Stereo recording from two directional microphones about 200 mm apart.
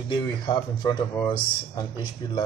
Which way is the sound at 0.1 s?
20° left (ahead or behind).